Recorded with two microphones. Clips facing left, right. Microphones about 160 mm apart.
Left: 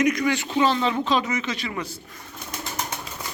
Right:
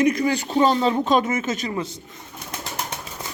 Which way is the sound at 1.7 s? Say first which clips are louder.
Right 4 dB; 25° right (ahead or behind).